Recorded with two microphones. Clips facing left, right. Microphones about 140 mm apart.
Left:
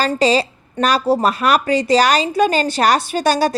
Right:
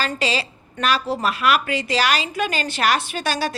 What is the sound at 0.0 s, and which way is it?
A woman's voice, 40° left (ahead or behind).